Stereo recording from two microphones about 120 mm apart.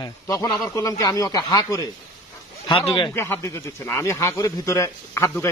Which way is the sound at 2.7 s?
45° left (ahead or behind).